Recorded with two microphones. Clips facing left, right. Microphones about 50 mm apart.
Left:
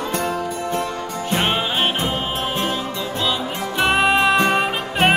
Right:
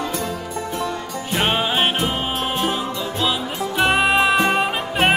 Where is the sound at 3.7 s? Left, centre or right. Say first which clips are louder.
Even; centre.